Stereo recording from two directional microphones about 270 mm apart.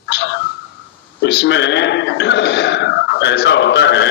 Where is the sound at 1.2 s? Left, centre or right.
Left.